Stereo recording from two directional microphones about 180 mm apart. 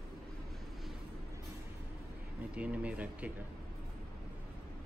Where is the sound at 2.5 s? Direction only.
5° right (ahead or behind).